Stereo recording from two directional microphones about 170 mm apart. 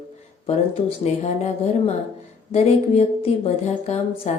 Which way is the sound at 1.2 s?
40° left (ahead or behind).